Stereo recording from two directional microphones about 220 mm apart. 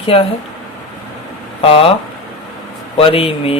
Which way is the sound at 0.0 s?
25° left (ahead or behind).